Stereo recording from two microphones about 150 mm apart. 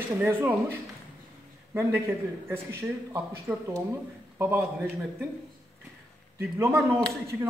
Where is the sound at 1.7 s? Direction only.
15° right (ahead or behind).